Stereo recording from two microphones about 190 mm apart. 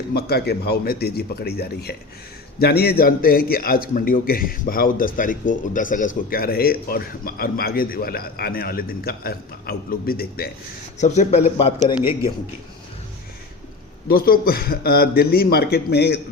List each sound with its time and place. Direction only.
0.1 s a man's voice: 55° left (ahead or behind)
11.0 s a man's voice: 35° left (ahead or behind)
14.1 s a man's voice: 50° left (ahead or behind)